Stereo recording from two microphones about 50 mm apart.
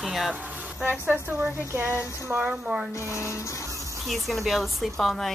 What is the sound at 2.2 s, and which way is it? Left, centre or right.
Speech, right.